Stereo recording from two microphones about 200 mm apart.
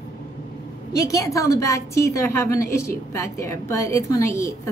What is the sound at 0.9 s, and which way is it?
A woman's voice, 15° left (ahead or behind).